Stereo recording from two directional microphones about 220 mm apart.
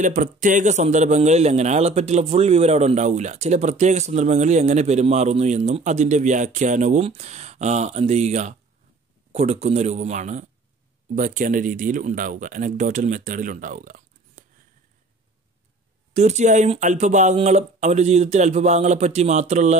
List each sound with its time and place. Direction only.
0.0 s a man's voice: 35° right (ahead or behind)
16.1 s a man's voice: 30° right (ahead or behind)